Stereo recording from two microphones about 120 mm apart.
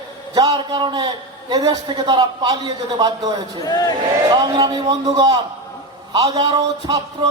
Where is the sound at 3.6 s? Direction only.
30° left (ahead or behind).